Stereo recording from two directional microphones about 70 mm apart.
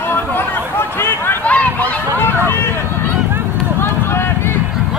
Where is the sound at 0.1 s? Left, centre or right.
Left.